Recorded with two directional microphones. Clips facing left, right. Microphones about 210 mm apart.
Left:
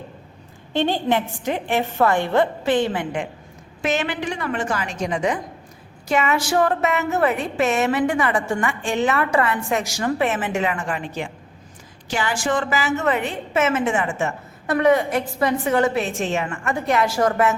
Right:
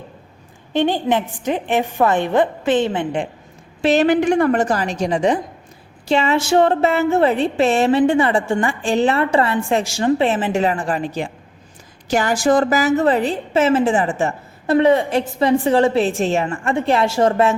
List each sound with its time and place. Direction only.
0.7 s a woman's voice: 15° right (ahead or behind)